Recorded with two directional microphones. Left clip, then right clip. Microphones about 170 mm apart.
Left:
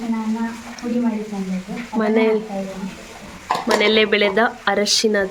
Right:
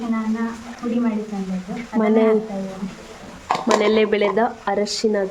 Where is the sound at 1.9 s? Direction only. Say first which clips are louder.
Right 1 dB; 15° right (ahead or behind).